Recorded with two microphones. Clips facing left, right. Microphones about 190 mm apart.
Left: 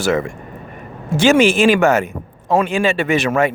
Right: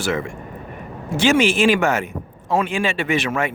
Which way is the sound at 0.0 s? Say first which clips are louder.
Left 5 dB; 40° left (ahead or behind).